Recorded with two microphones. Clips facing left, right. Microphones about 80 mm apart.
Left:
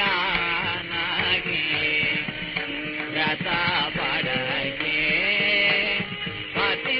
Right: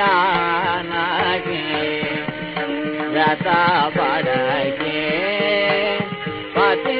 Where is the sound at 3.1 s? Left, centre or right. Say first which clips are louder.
Right 10 dB; right.